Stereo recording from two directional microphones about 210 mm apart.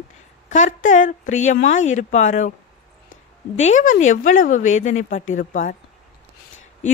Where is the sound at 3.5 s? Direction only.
35° left (ahead or behind).